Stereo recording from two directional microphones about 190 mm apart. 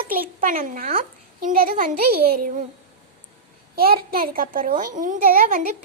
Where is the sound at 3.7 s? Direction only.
50° right (ahead or behind).